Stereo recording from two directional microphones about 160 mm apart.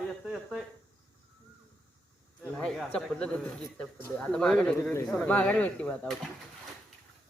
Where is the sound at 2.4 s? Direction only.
5° left (ahead or behind).